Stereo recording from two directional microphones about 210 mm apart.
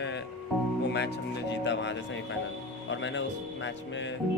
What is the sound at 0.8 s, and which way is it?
Speech, 55° left (ahead or behind).